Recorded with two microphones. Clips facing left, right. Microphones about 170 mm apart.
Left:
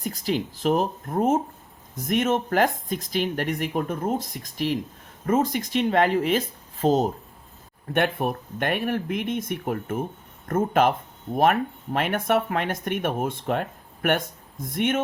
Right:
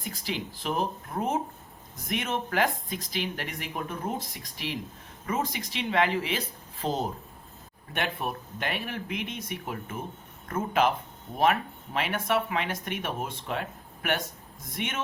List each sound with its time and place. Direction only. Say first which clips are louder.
0.0 s speech: left 8 dB; 45° left (ahead or behind)
11.9 s speech: left 5 dB; 50° left (ahead or behind)